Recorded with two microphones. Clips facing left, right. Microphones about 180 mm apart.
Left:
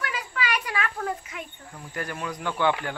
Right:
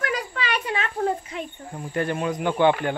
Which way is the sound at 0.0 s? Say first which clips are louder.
Right 4 dB; 35° right (ahead or behind).